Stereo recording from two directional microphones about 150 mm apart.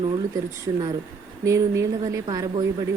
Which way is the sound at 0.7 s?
25° right (ahead or behind).